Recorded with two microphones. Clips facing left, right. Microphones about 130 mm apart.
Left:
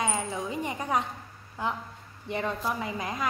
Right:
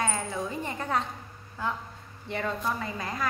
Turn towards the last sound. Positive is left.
turn(degrees=15)  # may be behind; listen again after turning